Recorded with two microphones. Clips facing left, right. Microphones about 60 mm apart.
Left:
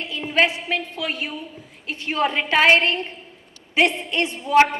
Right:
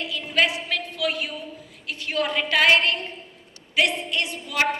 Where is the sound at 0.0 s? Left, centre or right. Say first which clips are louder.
Left 3 dB; left.